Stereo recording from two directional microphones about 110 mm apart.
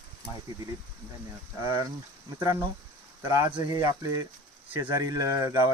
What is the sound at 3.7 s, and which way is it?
Speech, 35° right (ahead or behind).